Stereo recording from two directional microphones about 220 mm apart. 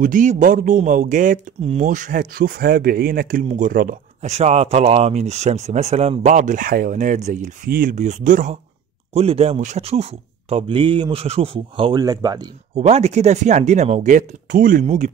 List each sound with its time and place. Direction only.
0.0 s a man's voice: 35° right (ahead or behind); by 12.4 s 15° right (ahead or behind)
12.7 s a man's voice: 30° right (ahead or behind)